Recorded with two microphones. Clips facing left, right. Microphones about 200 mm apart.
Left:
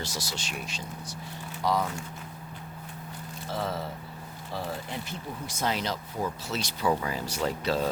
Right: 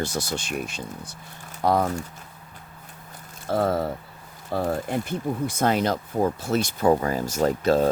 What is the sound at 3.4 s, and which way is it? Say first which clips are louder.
Speech: right 10 dB; 55° right (ahead or behind).